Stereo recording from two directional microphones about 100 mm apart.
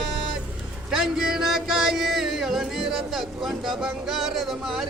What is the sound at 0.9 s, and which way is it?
Music, 5° right (ahead or behind).